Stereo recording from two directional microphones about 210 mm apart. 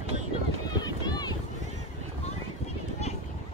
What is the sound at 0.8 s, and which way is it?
Run, 20° left (ahead or behind).